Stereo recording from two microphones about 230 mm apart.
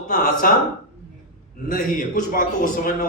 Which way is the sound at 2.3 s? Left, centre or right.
Left.